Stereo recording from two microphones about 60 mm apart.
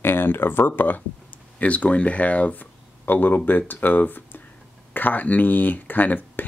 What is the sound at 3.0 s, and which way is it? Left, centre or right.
Speech, left.